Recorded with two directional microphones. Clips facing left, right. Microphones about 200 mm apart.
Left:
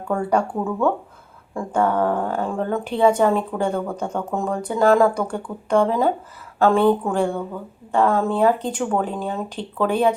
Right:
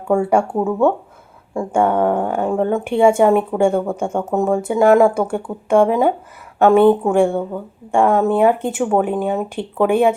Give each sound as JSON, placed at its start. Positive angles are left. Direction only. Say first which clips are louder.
{"t": 0.1, "sound": "speech", "louder": "right 5 dB", "side_deg": -10}
{"t": 0.6, "sound": "speech", "louder": "right 5 dB", "side_deg": -25}
{"t": 2.8, "sound": "speech", "louder": "right 3 dB", "side_deg": -10}
{"t": 3.7, "sound": "speech", "louder": "right 5 dB", "side_deg": -25}
{"t": 4.5, "sound": "speech", "louder": "right 4 dB", "side_deg": -10}
{"t": 5.1, "sound": "speech", "louder": "right 5 dB", "side_deg": -5}